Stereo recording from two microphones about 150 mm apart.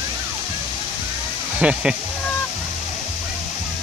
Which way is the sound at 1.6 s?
5° right (ahead or behind).